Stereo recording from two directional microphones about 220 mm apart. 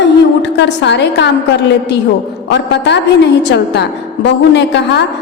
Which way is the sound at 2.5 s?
50° left (ahead or behind).